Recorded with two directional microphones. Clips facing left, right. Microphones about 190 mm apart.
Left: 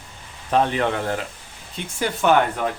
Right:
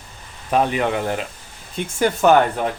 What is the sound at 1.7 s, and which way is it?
Speech, 45° right (ahead or behind).